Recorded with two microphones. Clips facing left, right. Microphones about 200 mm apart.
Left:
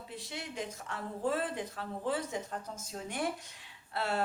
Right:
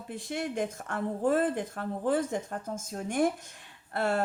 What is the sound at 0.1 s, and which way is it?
Speech, 50° right (ahead or behind).